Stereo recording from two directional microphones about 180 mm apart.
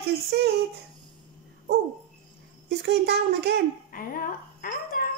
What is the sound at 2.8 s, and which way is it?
Speech, 65° right (ahead or behind).